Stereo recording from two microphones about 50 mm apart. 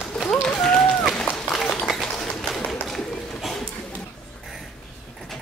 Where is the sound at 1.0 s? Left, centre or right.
Centre.